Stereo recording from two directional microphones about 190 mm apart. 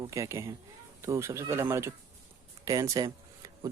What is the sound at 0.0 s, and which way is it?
Speech, 15° right (ahead or behind).